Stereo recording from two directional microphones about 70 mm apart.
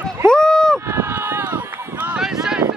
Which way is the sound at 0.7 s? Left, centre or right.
Right.